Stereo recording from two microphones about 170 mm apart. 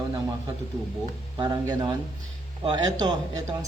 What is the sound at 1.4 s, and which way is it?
Speech, 25° right (ahead or behind).